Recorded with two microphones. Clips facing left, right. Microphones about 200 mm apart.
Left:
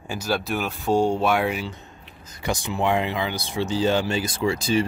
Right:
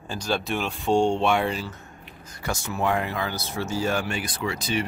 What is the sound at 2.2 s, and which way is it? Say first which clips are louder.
Speech: left 3 dB; 20° left (ahead or behind).